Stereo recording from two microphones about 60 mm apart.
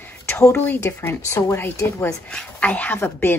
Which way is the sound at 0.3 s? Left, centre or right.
Left.